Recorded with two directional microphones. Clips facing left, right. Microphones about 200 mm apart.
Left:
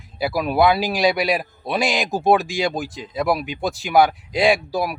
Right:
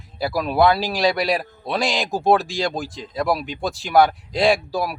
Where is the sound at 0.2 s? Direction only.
5° left (ahead or behind).